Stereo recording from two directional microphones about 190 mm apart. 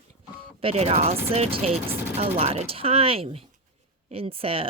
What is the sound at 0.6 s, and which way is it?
A woman's voice, 30° right (ahead or behind).